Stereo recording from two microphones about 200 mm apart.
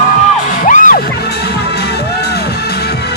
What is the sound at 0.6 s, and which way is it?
Music, 40° left (ahead or behind).